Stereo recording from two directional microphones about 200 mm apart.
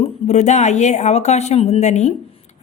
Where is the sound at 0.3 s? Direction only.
35° left (ahead or behind).